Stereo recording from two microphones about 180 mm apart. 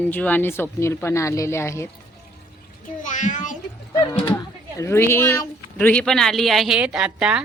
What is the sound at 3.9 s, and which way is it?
Speech, 20° left (ahead or behind).